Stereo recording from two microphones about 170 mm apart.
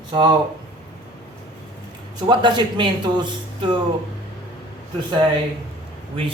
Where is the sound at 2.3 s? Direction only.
25° right (ahead or behind).